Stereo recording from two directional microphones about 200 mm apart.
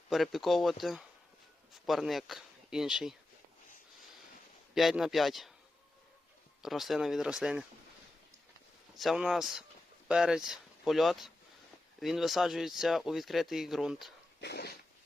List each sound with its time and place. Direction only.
0.1 s speech: centre (ahead or behind)
4.7 s speech: centre (ahead or behind)
6.6 s speech: centre (ahead or behind)
9.0 s speech: centre (ahead or behind)
14.4 s dog: 55° left (ahead or behind)